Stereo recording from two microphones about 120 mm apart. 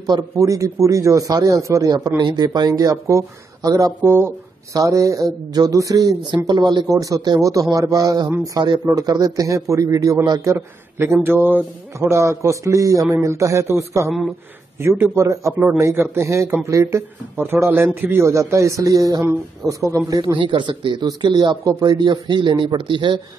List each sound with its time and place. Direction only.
0.0 s a man's voice: 30° right (ahead or behind)